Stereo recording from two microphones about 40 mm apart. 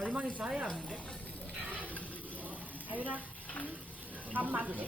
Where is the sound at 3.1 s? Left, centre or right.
Left.